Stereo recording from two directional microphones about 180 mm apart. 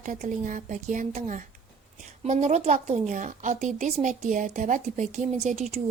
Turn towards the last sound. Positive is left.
turn(degrees=-35)  # may be behind; listen again after turning